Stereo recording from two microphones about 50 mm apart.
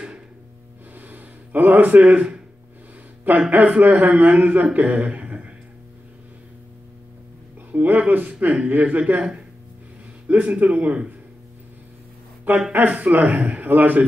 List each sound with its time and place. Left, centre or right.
0.9 s a sound: right
3.3 s a man's voice: right
7.7 s a man's voice: right
10.2 s a man's voice: right
12.7 s a man's voice: right